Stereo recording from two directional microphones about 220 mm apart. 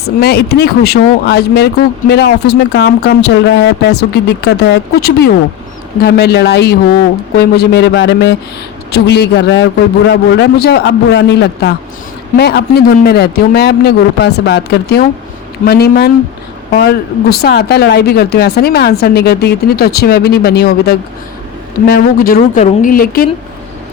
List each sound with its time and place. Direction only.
0.0 s speech: 45° left (ahead or behind)